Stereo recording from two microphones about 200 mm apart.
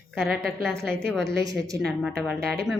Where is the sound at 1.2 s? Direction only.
15° right (ahead or behind).